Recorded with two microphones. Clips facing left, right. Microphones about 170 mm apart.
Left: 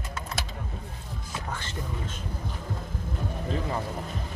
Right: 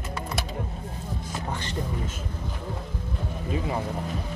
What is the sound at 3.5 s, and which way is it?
Music, 15° right (ahead or behind).